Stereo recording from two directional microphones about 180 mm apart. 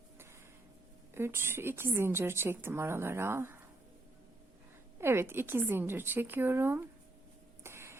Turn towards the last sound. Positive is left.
turn(degrees=-15)  # may be behind; listen again after turning